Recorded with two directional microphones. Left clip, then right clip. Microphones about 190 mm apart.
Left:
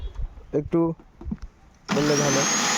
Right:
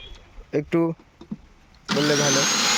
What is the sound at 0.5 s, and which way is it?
Speech, 5° left (ahead or behind).